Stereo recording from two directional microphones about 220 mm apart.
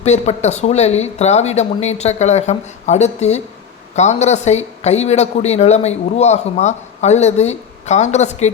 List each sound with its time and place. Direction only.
0.0 s speech: 30° left (ahead or behind)